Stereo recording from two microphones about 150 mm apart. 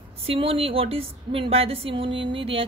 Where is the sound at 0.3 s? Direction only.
40° right (ahead or behind).